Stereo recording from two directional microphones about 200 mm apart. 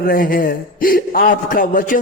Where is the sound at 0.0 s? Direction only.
45° left (ahead or behind).